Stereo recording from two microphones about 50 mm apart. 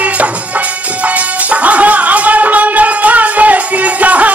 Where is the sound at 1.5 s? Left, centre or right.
Right.